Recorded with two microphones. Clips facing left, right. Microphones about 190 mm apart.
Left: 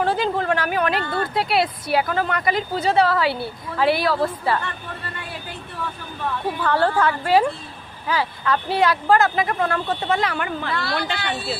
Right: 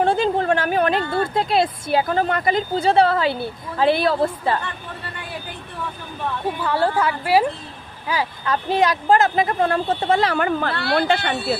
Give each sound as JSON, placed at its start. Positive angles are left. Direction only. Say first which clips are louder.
{"t": 0.0, "sound": "a sound", "louder": "right 3 dB", "side_deg": -25}
{"t": 1.0, "sound": "speech", "louder": "right 2 dB", "side_deg": -25}
{"t": 6.6, "sound": "a woman's voice", "louder": "left 1 dB", "side_deg": -10}
{"t": 10.8, "sound": "speech", "louder": "right 6 dB", "side_deg": -60}